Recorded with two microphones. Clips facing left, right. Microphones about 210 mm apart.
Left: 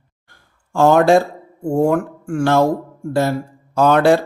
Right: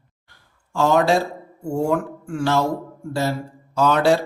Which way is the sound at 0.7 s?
50° left (ahead or behind).